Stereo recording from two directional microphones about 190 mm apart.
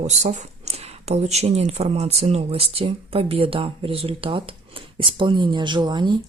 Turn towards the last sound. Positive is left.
turn(degrees=-25)  # may be behind; listen again after turning